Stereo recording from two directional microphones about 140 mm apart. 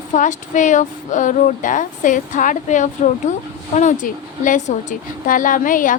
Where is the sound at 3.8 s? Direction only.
60° left (ahead or behind).